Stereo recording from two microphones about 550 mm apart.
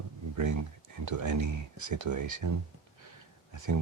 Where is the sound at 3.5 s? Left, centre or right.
Right.